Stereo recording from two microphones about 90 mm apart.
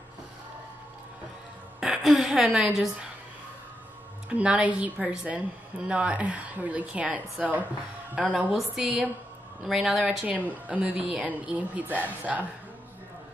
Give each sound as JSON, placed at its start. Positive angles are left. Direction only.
{"t": 1.8, "sound": "a woman's voice", "side_deg": -5}
{"t": 4.3, "sound": "a woman's voice", "side_deg": -15}
{"t": 7.4, "sound": "a woman's voice", "side_deg": -5}
{"t": 10.7, "sound": "a woman's voice", "side_deg": -10}